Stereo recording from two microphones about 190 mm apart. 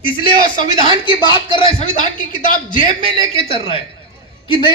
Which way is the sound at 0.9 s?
25° left (ahead or behind).